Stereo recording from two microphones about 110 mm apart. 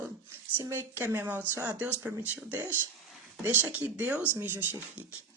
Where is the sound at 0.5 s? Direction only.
25° right (ahead or behind).